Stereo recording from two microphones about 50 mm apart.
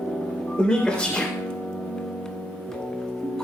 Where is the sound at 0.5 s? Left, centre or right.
Centre.